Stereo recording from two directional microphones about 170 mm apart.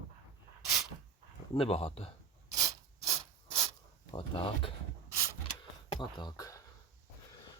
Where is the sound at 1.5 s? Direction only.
35° left (ahead or behind).